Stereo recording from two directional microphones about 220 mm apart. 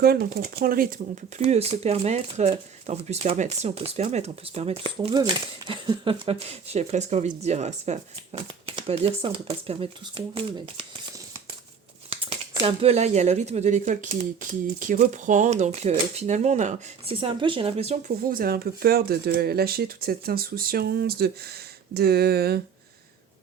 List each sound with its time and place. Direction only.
0.0 s speech: 45° right (ahead or behind)
1.4 s speech: 25° right (ahead or behind)
12.1 s speech: 25° right (ahead or behind)
18.2 s speech: 40° right (ahead or behind)